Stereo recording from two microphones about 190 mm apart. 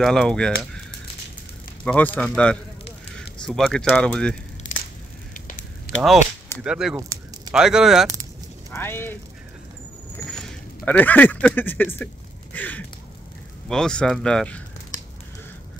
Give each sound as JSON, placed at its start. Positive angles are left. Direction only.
{"t": 0.0, "sound": "speech", "side_deg": 5}
{"t": 1.9, "sound": "speech", "side_deg": 5}
{"t": 4.6, "sound": "crushing", "side_deg": 80}
{"t": 5.3, "sound": "fire", "side_deg": 45}
{"t": 6.6, "sound": "speech", "side_deg": -5}
{"t": 7.0, "sound": "a sound", "side_deg": -15}
{"t": 7.5, "sound": "speech", "side_deg": -5}
{"t": 8.7, "sound": "speech", "side_deg": 10}
{"t": 10.3, "sound": "speech", "side_deg": 5}
{"t": 12.5, "sound": "a sound", "side_deg": 10}
{"t": 13.7, "sound": "speech", "side_deg": 5}